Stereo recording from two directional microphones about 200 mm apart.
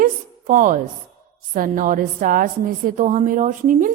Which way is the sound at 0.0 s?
40° right (ahead or behind).